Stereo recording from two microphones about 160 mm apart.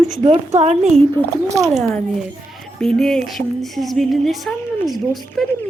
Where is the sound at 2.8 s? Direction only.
5° left (ahead or behind).